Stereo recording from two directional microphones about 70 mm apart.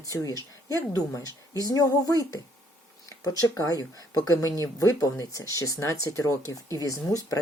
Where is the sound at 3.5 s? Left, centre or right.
Left.